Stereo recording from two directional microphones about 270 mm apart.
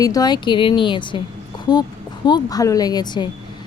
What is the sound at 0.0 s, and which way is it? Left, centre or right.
A woman's voice, centre.